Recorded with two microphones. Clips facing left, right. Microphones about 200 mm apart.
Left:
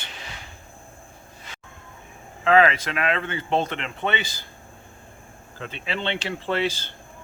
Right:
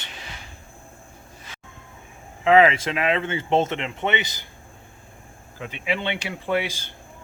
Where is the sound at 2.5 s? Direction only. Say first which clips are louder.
Right 2 dB; 20° right (ahead or behind).